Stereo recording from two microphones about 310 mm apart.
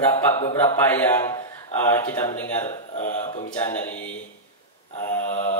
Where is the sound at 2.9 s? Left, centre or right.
Left.